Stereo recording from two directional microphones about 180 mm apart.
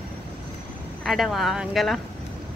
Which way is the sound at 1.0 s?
Centre (ahead or behind).